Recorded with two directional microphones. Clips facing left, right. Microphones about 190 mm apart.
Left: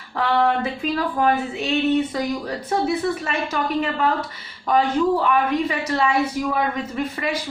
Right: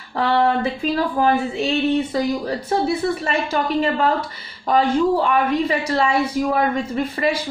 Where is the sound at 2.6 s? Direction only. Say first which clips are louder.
Right 1 dB; 30° right (ahead or behind).